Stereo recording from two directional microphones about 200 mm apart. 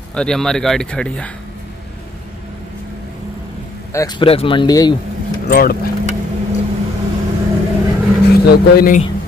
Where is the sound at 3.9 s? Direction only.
20° left (ahead or behind).